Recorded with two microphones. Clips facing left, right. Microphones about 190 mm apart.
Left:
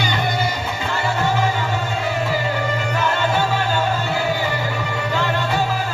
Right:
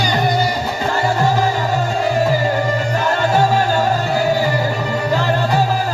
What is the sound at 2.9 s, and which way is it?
Music, 40° right (ahead or behind).